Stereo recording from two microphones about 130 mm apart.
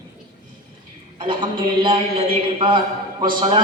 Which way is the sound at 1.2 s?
40° right (ahead or behind).